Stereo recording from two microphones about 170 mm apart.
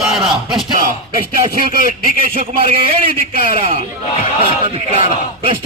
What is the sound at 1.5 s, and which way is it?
Speech, 55° right (ahead or behind).